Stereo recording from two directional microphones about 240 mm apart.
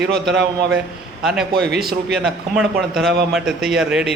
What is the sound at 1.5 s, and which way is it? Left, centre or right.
Speech, right.